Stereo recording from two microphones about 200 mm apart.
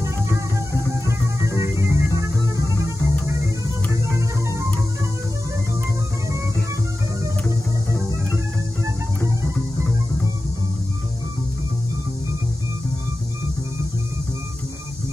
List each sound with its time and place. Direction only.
1.0 s music: 15° right (ahead or behind)